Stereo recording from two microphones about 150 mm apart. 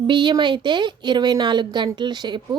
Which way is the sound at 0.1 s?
30° right (ahead or behind).